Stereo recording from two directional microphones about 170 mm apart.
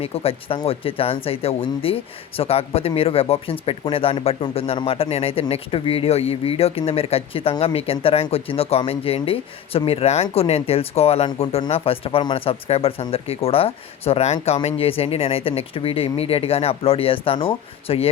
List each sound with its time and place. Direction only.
0.0 s speech: 35° left (ahead or behind)